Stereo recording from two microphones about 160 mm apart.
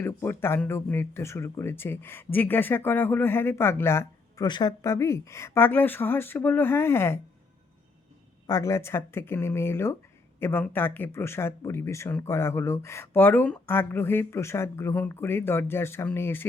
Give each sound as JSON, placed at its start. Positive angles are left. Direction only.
{"t": 0.0, "sound": "speech", "side_deg": 15}
{"t": 4.4, "sound": "speech", "side_deg": 25}
{"t": 8.4, "sound": "speech", "side_deg": 20}